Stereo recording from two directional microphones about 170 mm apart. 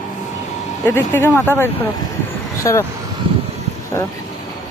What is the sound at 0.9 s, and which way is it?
Speech, 15° left (ahead or behind).